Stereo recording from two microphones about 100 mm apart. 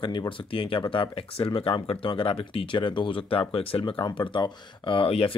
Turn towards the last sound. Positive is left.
turn(degrees=70)  # may be behind; listen again after turning